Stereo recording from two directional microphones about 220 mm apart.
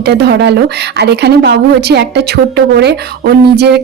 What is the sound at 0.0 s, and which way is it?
A woman's voice, 50° right (ahead or behind).